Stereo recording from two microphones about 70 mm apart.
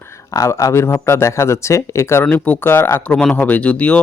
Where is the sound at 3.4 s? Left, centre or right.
Left.